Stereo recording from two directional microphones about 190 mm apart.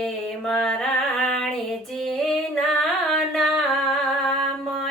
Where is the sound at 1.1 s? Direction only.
5° left (ahead or behind).